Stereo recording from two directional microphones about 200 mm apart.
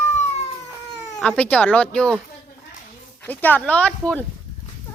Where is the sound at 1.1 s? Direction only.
5° left (ahead or behind).